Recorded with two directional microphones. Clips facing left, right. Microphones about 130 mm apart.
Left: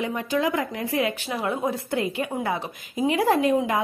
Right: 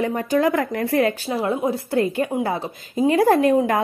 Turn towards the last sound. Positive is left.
turn(degrees=-55)  # may be behind; listen again after turning